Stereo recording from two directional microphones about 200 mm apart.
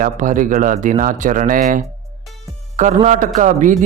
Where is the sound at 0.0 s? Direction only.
40° right (ahead or behind).